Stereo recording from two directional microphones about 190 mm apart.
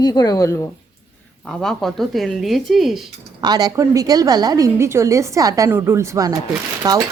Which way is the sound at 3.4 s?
20° right (ahead or behind).